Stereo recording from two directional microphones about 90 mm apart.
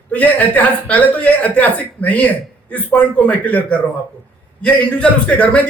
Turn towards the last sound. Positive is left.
turn(degrees=15)  # may be behind; listen again after turning